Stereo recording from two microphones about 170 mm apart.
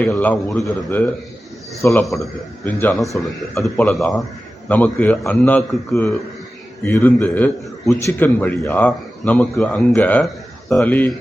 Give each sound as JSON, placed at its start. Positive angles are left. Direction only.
{"t": 0.0, "sound": "a man's voice", "side_deg": 10}
{"t": 2.9, "sound": "a man's voice", "side_deg": 0}